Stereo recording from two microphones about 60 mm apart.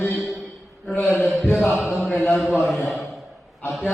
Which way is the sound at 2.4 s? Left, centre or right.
Centre.